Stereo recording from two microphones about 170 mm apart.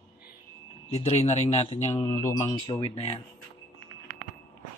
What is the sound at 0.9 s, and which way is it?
Speech, 40° left (ahead or behind).